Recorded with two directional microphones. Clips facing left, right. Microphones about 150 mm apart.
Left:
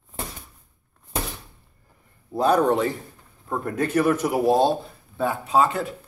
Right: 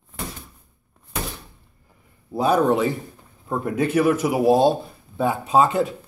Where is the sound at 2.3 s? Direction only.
5° right (ahead or behind).